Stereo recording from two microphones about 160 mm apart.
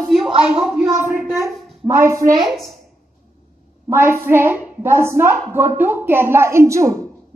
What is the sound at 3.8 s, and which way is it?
A woman's voice, 15° right (ahead or behind).